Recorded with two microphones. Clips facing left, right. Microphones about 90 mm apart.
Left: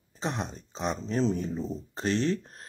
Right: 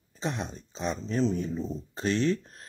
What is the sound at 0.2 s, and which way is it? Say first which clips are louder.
Speech: even; 35° left (ahead or behind).